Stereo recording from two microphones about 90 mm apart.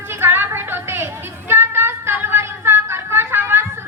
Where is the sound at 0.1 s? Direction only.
25° right (ahead or behind).